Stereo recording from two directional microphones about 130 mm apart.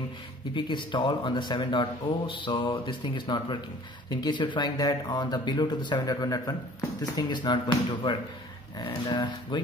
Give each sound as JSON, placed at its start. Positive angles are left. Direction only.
{"t": 0.6, "sound": "speech", "side_deg": 35}